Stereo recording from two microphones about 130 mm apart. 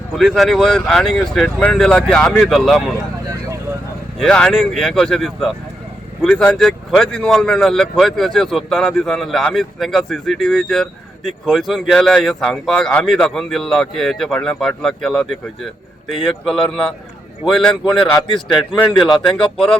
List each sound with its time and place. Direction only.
0.2 s speech: centre (ahead or behind)
4.2 s speech: 5° left (ahead or behind)